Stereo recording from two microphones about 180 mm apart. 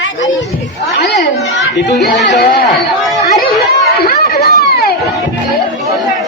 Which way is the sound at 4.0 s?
60° left (ahead or behind).